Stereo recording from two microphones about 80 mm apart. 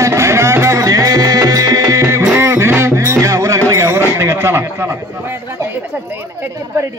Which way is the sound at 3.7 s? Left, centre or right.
Right.